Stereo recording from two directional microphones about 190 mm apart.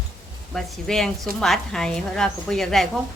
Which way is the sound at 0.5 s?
Centre (ahead or behind).